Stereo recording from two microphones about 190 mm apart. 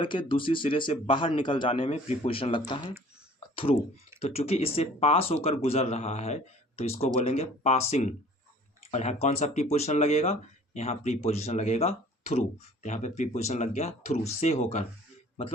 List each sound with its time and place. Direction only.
0.0 s speech: 25° left (ahead or behind)